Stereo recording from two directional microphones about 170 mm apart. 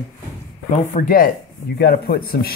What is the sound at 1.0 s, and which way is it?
Speech, 55° left (ahead or behind).